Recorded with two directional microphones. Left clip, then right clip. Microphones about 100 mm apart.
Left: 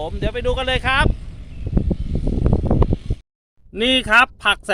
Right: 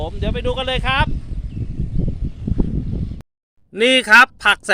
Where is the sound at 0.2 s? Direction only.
15° left (ahead or behind).